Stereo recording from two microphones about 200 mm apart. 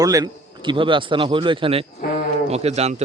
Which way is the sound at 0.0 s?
20° right (ahead or behind).